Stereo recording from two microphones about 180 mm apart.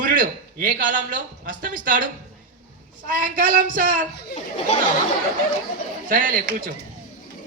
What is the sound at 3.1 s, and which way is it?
Speech, 50° right (ahead or behind).